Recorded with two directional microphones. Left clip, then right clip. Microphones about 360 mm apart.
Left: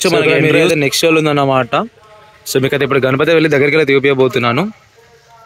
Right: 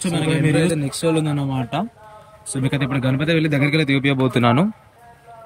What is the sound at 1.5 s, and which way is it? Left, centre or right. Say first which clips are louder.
Speech: left 12 dB; centre.